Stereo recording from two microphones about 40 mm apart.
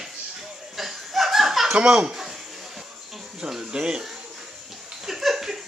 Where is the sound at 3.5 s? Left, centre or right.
Centre.